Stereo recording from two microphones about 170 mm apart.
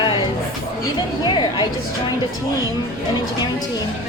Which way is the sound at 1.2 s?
25° left (ahead or behind).